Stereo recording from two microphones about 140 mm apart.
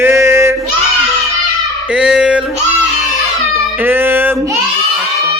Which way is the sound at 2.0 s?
5° right (ahead or behind).